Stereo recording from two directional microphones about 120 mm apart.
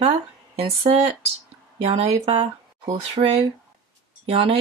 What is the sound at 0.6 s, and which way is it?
Speech, 55° right (ahead or behind).